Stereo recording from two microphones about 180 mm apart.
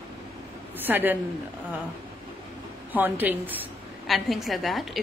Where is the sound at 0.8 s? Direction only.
10° right (ahead or behind).